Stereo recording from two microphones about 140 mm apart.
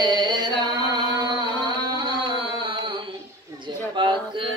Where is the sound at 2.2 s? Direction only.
35° right (ahead or behind).